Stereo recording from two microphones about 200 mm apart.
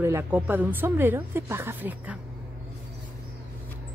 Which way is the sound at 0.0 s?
10° right (ahead or behind).